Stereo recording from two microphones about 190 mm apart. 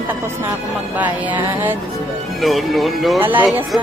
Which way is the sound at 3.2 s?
10° right (ahead or behind).